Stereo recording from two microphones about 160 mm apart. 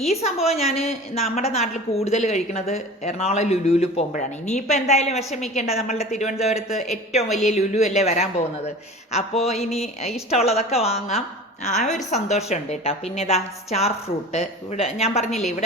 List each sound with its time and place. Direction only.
0.1 s a woman's voice: 40° left (ahead or behind)
7.3 s speech: centre (ahead or behind)
7.5 s a man's voice: 45° left (ahead or behind)